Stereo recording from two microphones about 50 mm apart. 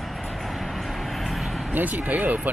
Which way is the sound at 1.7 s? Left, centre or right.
Right.